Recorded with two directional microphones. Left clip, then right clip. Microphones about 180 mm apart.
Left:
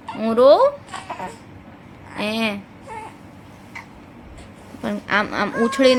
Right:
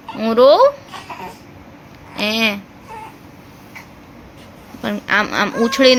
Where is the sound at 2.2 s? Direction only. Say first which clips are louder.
Right 6 dB; 5° right (ahead or behind).